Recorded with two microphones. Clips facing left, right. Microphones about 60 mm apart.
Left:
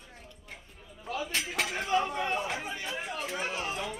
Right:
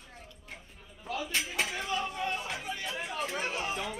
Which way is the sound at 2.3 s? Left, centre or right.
Left.